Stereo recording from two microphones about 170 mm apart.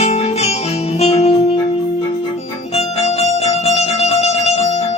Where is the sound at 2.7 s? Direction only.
40° left (ahead or behind).